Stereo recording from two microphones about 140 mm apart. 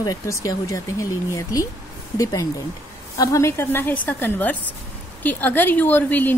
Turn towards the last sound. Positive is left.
turn(degrees=15)  # may be behind; listen again after turning